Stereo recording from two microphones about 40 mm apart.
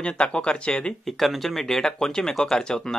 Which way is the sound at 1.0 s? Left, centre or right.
Centre.